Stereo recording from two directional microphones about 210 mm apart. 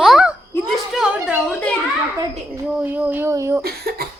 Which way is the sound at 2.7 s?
5° right (ahead or behind).